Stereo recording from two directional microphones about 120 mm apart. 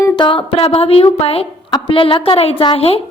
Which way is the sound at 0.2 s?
45° left (ahead or behind).